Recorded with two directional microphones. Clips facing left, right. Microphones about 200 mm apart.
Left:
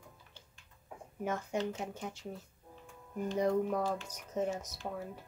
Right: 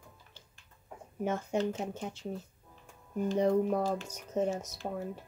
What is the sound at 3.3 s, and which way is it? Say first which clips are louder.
Speech: right 3 dB; 25° right (ahead or behind).